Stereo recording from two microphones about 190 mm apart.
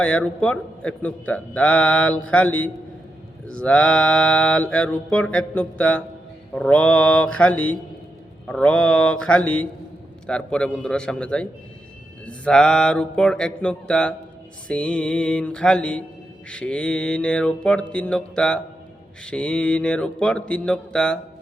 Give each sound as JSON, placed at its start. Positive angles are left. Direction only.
{"t": 0.0, "sound": "a man's voice", "side_deg": 5}
{"t": 3.4, "sound": "mantra", "side_deg": 5}
{"t": 6.5, "sound": "a man's voice", "side_deg": 5}
{"t": 8.4, "sound": "mantra", "side_deg": 5}